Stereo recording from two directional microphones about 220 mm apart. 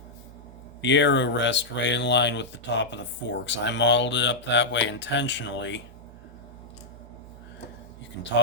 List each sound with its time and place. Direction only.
0.8 s speech: 55° left (ahead or behind)